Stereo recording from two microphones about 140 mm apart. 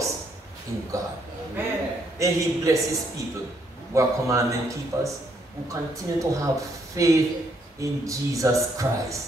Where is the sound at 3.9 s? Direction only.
20° right (ahead or behind).